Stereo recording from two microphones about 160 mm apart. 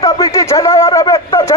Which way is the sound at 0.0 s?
20° left (ahead or behind).